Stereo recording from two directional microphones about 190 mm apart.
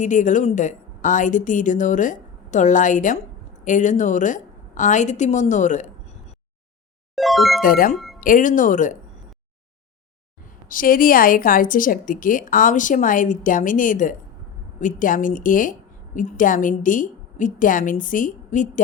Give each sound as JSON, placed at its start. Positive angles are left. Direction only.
{"t": 0.0, "sound": "a woman's voice", "side_deg": 40}
{"t": 7.2, "sound": "music", "side_deg": 0}
{"t": 7.6, "sound": "a woman's voice", "side_deg": 45}
{"t": 7.9, "sound": "music", "side_deg": 0}
{"t": 8.2, "sound": "a woman's voice", "side_deg": 45}
{"t": 10.4, "sound": "a woman's voice", "side_deg": 45}